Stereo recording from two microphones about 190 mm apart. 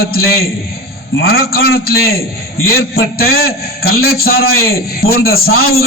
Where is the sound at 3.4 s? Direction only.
55° left (ahead or behind).